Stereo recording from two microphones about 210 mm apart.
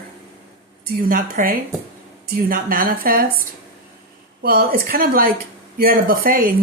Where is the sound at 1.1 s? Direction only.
40° right (ahead or behind).